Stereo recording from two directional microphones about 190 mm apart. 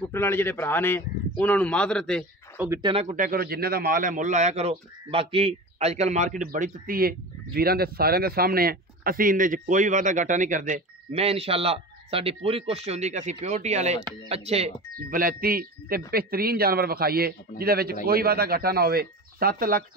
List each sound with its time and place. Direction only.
0.1 s a man's voice: 10° left (ahead or behind)
2.5 s speech: 10° right (ahead or behind)
2.8 s speech: 30° right (ahead or behind)
3.2 s a man's voice: 50° right (ahead or behind); by 14.7 s 30° right (ahead or behind)
14.9 s a man's voice: 45° right (ahead or behind)